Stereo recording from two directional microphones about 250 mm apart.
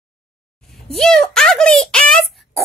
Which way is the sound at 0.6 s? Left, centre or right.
Centre.